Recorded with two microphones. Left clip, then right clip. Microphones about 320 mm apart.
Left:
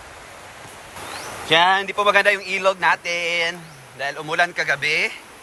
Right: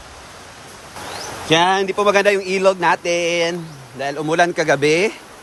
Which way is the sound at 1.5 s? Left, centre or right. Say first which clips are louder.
Right 1 dB; centre.